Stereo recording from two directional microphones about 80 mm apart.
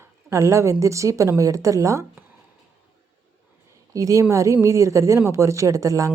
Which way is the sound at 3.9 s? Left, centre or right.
Right.